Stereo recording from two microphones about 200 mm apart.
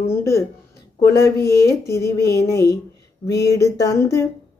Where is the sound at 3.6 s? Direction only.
15° left (ahead or behind).